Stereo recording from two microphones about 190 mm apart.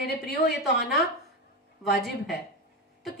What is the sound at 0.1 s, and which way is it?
Speech, 60° left (ahead or behind).